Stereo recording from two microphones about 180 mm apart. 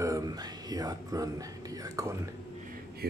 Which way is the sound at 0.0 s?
20° right (ahead or behind).